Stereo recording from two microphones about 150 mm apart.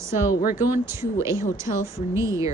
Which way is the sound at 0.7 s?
15° right (ahead or behind).